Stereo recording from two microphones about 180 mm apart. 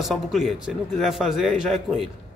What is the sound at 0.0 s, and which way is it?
A man's voice, centre (ahead or behind).